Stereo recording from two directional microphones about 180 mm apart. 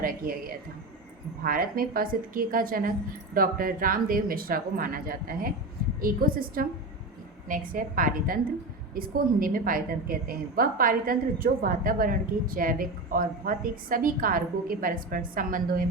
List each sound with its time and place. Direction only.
0.0 s a woman's voice: 50° right (ahead or behind)